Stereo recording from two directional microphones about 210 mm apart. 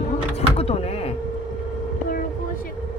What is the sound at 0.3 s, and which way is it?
Door, 30° left (ahead or behind).